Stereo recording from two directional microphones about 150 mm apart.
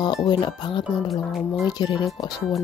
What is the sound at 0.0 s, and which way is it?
Speech, 30° left (ahead or behind).